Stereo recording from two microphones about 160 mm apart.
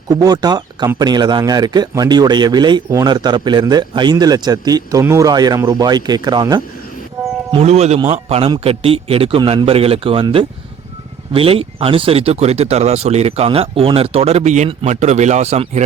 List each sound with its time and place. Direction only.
0.1 s speech: 25° right (ahead or behind)
7.5 s speech: 40° right (ahead or behind)